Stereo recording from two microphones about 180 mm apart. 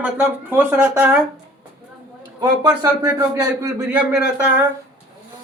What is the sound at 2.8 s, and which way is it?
Speech, 20° right (ahead or behind).